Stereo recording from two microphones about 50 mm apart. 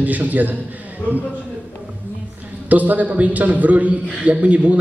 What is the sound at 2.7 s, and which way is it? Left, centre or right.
A man's voice, right.